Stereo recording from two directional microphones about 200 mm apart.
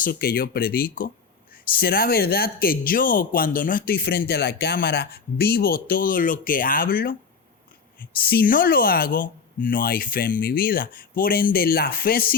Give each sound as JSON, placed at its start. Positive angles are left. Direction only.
{"t": 0.0, "sound": "speech", "side_deg": 45}